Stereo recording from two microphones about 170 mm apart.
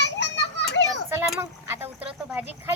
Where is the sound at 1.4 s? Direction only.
15° right (ahead or behind).